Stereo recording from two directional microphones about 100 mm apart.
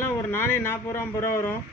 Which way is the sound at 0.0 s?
25° left (ahead or behind).